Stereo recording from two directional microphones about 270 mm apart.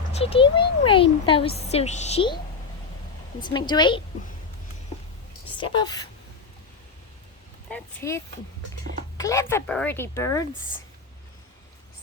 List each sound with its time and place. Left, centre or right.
0.1 s speech: left
3.4 s speech: centre
5.5 s speech: centre
7.7 s speech: centre